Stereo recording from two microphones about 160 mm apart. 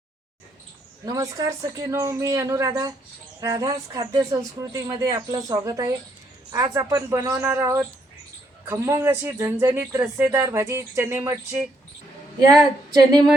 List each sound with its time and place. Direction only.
1.0 s speech: 20° right (ahead or behind)